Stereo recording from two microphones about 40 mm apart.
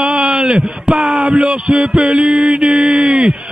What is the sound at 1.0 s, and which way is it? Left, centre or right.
Speech, centre.